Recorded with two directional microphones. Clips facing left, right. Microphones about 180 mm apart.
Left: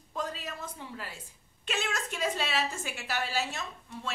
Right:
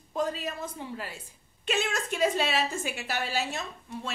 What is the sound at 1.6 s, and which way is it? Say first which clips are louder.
Speech: right 4 dB; 20° right (ahead or behind).